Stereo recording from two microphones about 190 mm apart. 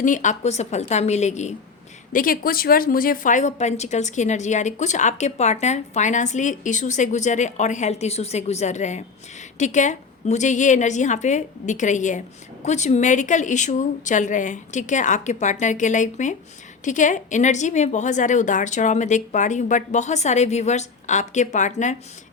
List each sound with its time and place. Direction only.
0.0 s a woman's voice: 40° left (ahead or behind)
2.1 s a woman's voice: 50° left (ahead or behind)